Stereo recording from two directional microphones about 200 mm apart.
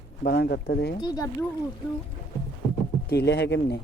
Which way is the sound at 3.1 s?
55° left (ahead or behind).